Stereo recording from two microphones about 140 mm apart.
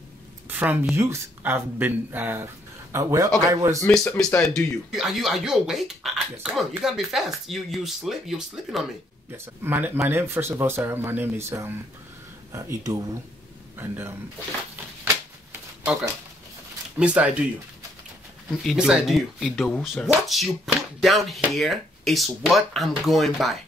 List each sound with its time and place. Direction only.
0.5 s a man's voice: 15° right (ahead or behind)
3.8 s speech: 5° left (ahead or behind)
9.6 s speech: 15° right (ahead or behind)
17.0 s speech: 10° right (ahead or behind)
18.6 s speech: centre (ahead or behind)